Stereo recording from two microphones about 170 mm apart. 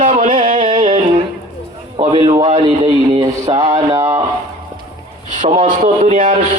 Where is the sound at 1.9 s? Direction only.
35° right (ahead or behind).